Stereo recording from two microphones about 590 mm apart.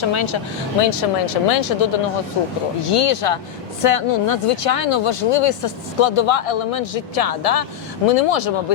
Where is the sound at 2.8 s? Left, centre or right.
Left.